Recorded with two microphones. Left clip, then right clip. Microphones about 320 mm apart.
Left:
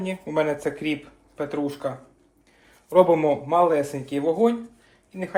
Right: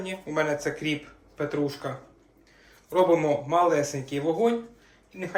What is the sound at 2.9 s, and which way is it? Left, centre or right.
Speech, left.